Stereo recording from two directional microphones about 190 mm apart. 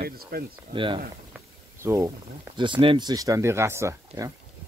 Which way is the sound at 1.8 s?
15° right (ahead or behind).